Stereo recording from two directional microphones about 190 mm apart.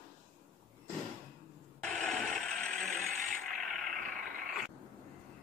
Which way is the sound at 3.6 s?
Centre (ahead or behind).